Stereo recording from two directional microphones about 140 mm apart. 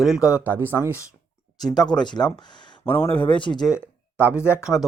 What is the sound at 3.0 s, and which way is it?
Speech, 40° left (ahead or behind).